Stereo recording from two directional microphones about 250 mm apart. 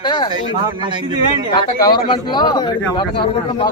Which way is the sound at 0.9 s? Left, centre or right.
Centre.